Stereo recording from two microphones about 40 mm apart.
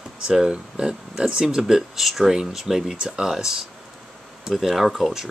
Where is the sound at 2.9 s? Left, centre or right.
Right.